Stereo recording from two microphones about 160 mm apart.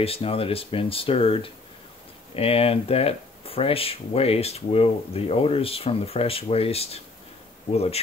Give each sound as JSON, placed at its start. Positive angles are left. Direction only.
{"t": 0.0, "sound": "speech", "side_deg": 35}